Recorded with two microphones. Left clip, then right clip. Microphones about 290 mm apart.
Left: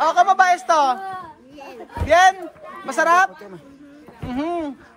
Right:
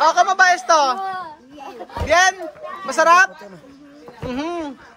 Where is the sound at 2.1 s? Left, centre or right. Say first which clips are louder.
Left 1 dB; centre.